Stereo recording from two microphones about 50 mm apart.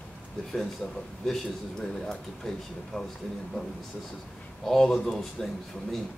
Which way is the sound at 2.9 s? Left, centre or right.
Left.